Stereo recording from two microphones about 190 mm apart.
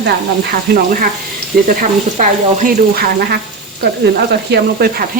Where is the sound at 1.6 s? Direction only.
40° right (ahead or behind).